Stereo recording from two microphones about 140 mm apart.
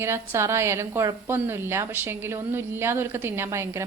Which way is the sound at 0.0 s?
20° right (ahead or behind).